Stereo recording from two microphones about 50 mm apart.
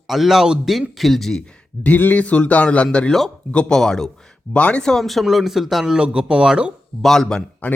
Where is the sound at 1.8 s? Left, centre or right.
Left.